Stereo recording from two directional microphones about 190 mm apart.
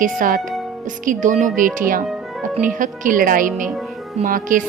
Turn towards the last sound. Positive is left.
turn(degrees=-45)  # may be behind; listen again after turning